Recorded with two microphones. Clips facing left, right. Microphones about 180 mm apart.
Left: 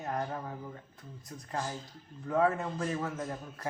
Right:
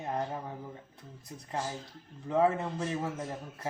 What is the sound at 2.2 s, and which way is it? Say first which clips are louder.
Speech: right 1 dB; 20° right (ahead or behind).